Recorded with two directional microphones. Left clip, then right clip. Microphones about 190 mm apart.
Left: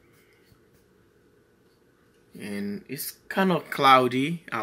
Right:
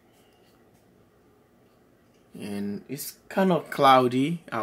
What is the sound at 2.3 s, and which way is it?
Speech, 15° right (ahead or behind).